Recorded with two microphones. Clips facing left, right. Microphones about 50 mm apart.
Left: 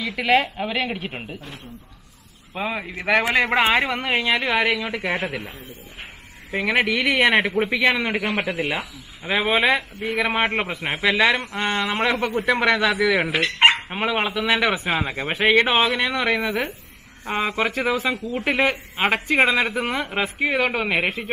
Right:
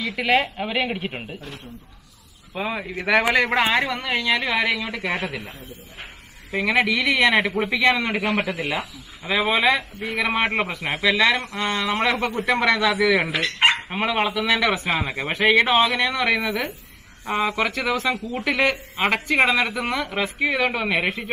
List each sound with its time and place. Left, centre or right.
0.0 s a woman's voice: centre
2.5 s a woman's voice: centre; by 4.4 s left
4.4 s speech: centre
7.0 s speech: centre
12.0 s speech: centre; by 17.6 s left
17.6 s speech: centre
18.4 s speech: centre